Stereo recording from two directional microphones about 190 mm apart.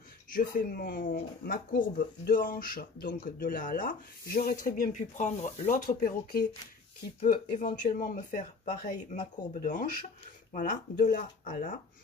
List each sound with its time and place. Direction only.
0.3 s speech: 45° left (ahead or behind)